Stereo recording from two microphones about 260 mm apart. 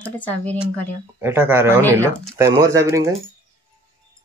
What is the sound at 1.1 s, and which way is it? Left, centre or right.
Speech, centre.